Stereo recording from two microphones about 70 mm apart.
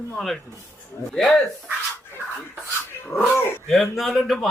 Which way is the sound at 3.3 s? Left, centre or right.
Left.